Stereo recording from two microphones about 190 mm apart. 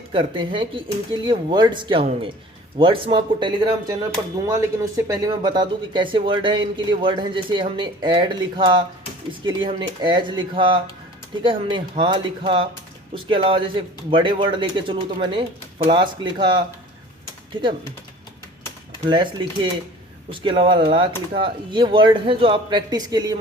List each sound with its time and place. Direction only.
0.1 s speech: 25° right (ahead or behind)
19.0 s speech: 25° right (ahead or behind)
20.3 s speech: 25° right (ahead or behind)